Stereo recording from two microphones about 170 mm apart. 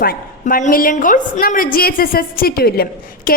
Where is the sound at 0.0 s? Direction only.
60° left (ahead or behind).